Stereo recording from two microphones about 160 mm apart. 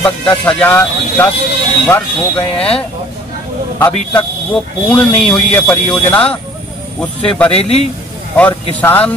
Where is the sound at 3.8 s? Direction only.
10° left (ahead or behind).